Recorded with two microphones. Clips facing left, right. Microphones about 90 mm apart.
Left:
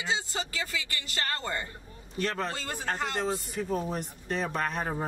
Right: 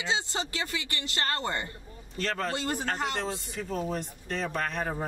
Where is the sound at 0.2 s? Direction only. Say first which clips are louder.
Right 1 dB; 25° right (ahead or behind).